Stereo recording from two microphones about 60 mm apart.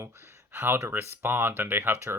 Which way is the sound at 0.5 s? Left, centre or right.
Right.